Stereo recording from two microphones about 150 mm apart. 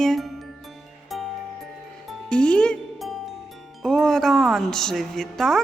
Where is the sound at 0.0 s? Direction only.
Centre (ahead or behind).